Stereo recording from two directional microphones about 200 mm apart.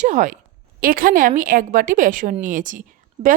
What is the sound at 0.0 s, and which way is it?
A woman's voice, 40° right (ahead or behind).